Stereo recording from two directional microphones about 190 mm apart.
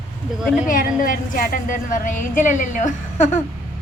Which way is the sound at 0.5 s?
45° left (ahead or behind).